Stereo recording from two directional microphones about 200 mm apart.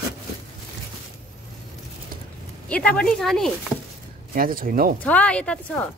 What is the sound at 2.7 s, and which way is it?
Speech, 5° left (ahead or behind).